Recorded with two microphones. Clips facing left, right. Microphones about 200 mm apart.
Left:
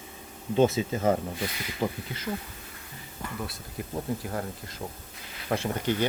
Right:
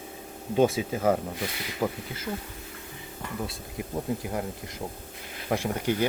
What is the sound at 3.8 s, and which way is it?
Speech, 15° right (ahead or behind).